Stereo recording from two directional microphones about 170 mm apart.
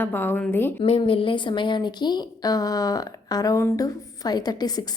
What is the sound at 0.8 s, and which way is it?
A woman's voice, 35° left (ahead or behind).